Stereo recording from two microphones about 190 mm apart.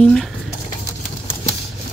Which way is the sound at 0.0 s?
5° left (ahead or behind).